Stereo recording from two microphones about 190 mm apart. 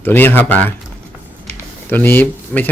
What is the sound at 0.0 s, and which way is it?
Speech, 10° left (ahead or behind).